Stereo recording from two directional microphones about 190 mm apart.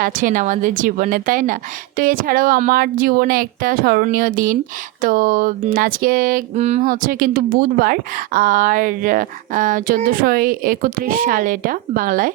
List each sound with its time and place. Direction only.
0.0 s a woman's voice: 45° right (ahead or behind)
6.8 s a woman's voice: 50° right (ahead or behind)